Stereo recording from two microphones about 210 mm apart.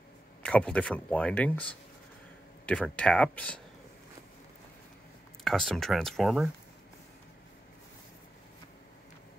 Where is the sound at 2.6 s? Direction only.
5° left (ahead or behind).